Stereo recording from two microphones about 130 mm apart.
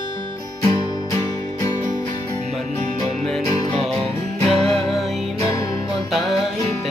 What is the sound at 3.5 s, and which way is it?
Music, 30° left (ahead or behind).